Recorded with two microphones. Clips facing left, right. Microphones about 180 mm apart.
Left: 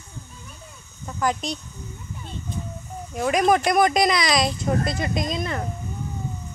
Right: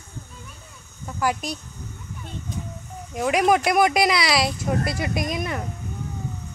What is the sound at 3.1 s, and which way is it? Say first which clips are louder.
Speech: even; 10° right (ahead or behind).